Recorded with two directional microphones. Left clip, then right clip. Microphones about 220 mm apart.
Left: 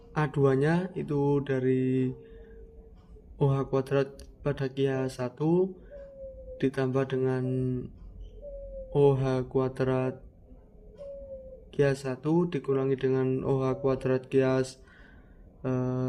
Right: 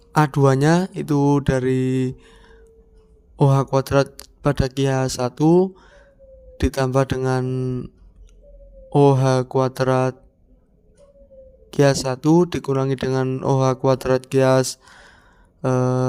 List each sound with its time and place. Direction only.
0.1 s speech: 45° right (ahead or behind)
8.9 s speech: 45° right (ahead or behind)
11.7 s speech: 45° right (ahead or behind)